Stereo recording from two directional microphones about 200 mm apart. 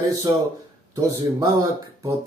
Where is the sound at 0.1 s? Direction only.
20° right (ahead or behind).